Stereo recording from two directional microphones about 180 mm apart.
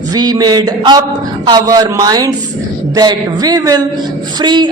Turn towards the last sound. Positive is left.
turn(degrees=-25)  # may be behind; listen again after turning